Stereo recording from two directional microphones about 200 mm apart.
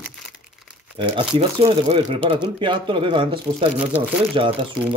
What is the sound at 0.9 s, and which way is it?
Speech, 25° right (ahead or behind).